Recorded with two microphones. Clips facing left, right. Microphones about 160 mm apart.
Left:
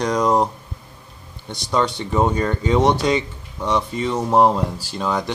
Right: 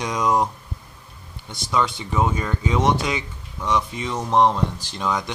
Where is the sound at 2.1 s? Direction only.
40° left (ahead or behind).